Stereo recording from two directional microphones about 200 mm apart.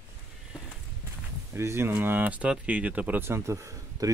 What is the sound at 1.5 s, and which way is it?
Speech, 10° right (ahead or behind).